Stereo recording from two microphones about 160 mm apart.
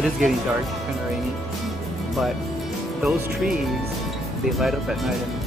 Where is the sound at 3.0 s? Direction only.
Centre (ahead or behind).